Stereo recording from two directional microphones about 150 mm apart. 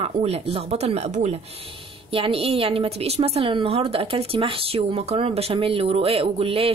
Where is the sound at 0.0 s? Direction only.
45° right (ahead or behind).